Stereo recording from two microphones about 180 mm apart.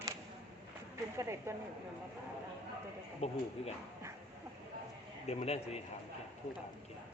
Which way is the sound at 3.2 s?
35° left (ahead or behind).